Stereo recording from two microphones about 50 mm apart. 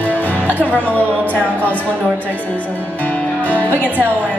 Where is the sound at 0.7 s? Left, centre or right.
Left.